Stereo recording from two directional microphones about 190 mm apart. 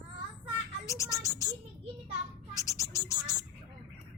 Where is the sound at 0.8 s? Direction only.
15° left (ahead or behind).